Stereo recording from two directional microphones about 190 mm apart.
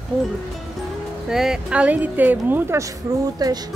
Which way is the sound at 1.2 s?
5° right (ahead or behind).